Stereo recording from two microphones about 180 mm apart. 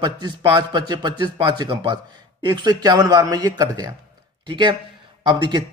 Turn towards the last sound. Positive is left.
turn(degrees=-25)  # may be behind; listen again after turning